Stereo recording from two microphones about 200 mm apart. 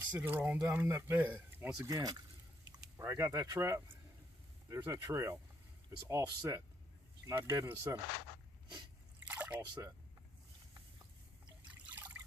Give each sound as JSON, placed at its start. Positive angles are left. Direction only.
{"t": 0.1, "sound": "speech", "side_deg": -10}
{"t": 9.2, "sound": "a sound", "side_deg": -10}
{"t": 11.7, "sound": "liquid", "side_deg": -10}